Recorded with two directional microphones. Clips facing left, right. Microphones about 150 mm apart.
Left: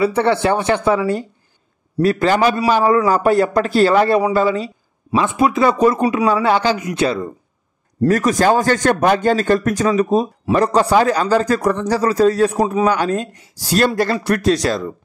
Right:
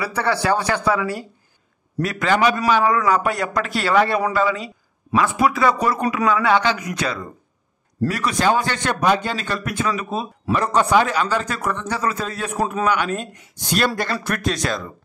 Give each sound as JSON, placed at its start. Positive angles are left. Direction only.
{"t": 0.0, "sound": "a man's voice", "side_deg": 25}
{"t": 8.1, "sound": "a man's voice", "side_deg": 45}